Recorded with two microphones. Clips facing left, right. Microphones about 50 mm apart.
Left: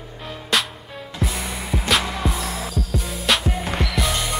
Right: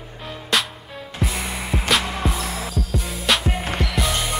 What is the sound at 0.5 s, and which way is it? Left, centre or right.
Music, centre.